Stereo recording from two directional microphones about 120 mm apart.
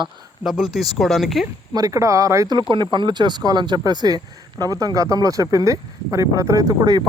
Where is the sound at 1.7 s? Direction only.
30° right (ahead or behind).